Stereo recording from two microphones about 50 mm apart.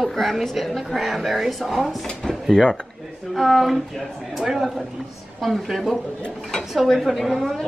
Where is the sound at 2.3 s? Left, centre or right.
Centre.